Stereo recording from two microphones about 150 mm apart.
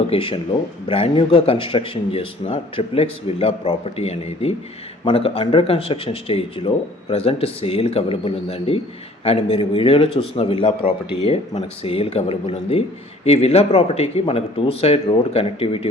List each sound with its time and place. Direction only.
0.1 s speech: 35° left (ahead or behind)